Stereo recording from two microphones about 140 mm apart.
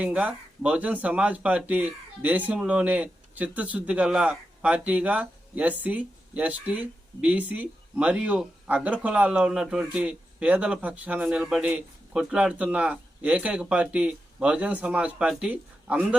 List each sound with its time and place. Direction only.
0.0 s speech: 10° right (ahead or behind)